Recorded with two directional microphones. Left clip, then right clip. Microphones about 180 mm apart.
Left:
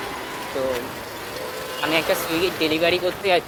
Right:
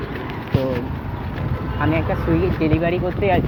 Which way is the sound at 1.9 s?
35° left (ahead or behind).